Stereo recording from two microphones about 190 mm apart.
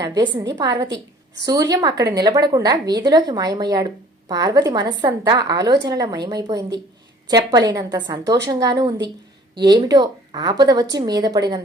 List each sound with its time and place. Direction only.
0.0 s a woman's voice: 20° right (ahead or behind)